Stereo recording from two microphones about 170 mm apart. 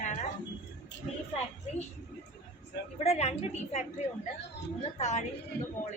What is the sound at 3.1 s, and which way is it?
Speech, 40° left (ahead or behind).